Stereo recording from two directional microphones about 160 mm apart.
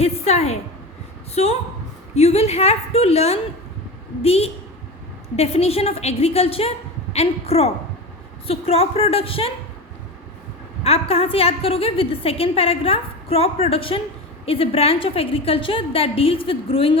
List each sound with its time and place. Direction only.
0.0 s a sound: 40° left (ahead or behind)
2.1 s a woman's voice: 40° left (ahead or behind)
10.8 s a woman's voice: 40° left (ahead or behind)